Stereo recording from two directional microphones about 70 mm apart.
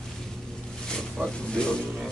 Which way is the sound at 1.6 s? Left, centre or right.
Centre.